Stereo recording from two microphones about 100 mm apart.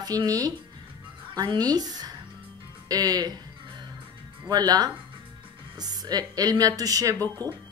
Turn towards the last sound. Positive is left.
turn(degrees=-35)  # may be behind; listen again after turning